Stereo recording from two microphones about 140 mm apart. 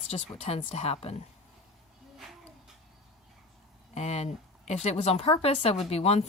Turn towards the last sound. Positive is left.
turn(degrees=50)  # may be behind; listen again after turning